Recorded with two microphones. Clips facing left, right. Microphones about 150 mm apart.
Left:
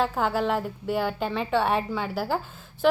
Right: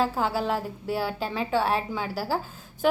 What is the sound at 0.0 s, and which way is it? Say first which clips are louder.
A woman's voice: left 1 dB; 5° right (ahead or behind).